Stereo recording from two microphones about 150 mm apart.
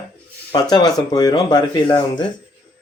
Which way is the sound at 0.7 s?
25° left (ahead or behind).